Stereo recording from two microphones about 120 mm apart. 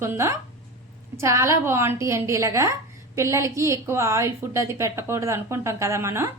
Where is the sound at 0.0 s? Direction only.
25° right (ahead or behind).